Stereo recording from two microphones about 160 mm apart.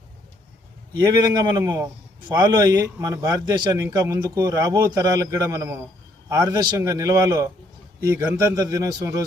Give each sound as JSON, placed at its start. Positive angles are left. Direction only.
{"t": 0.9, "sound": "a man's voice", "side_deg": -20}